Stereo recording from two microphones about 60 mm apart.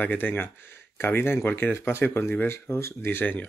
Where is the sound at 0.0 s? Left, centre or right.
Left.